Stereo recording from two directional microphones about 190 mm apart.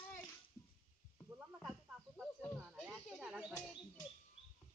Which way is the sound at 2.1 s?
5° right (ahead or behind).